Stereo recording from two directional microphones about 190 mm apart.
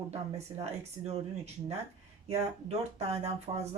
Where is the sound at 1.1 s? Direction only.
35° right (ahead or behind).